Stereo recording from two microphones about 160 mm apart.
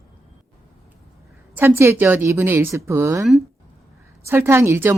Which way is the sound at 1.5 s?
15° right (ahead or behind).